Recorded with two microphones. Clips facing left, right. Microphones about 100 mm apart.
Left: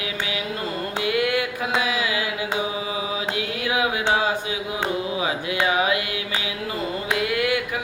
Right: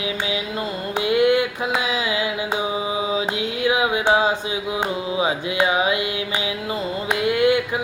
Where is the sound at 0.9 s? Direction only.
25° right (ahead or behind).